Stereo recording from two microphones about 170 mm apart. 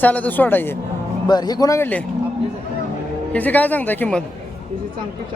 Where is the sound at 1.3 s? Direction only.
25° left (ahead or behind).